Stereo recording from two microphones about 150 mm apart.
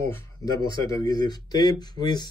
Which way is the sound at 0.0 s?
20° left (ahead or behind).